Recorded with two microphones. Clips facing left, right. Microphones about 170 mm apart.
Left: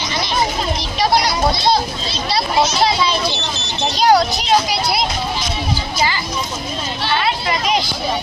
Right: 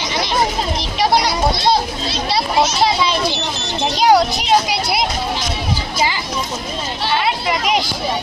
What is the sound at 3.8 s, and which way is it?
Speech, 15° right (ahead or behind).